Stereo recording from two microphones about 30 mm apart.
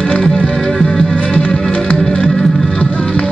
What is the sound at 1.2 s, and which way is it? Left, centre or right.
Music, left.